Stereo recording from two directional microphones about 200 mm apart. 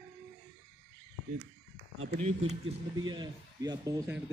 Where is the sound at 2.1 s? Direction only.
35° right (ahead or behind).